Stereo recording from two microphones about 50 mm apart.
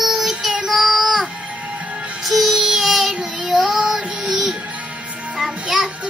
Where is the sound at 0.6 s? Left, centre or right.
Centre.